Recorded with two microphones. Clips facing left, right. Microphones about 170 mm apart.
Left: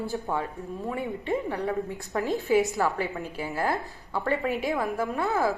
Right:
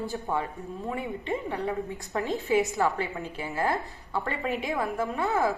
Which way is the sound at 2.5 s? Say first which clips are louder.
Left 1 dB; centre (ahead or behind).